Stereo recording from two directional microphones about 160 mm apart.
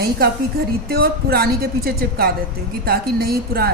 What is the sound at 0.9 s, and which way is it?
A woman's voice, 75° right (ahead or behind).